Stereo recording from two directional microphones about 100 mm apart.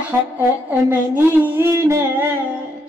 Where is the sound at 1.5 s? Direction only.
25° right (ahead or behind).